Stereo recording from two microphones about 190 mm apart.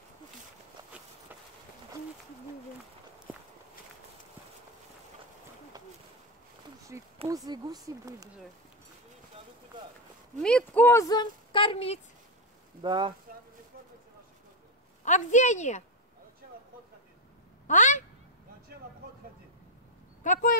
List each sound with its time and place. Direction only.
0.9 s walk: 5° right (ahead or behind)
6.9 s a sound: 15° right (ahead or behind)
7.2 s speech: 20° right (ahead or behind)
10.4 s speech: 5° left (ahead or behind); by 12.0 s 30° left (ahead or behind)
12.8 s speech: 25° right (ahead or behind)
15.0 s a woman's voice: 40° left (ahead or behind)
17.6 s speech: 40° left (ahead or behind)
20.2 s speech: 45° left (ahead or behind)